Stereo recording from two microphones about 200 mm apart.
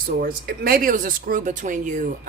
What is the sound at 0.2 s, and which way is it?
Speech, 45° right (ahead or behind).